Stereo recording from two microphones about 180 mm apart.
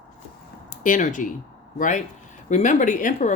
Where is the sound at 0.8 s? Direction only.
45° left (ahead or behind).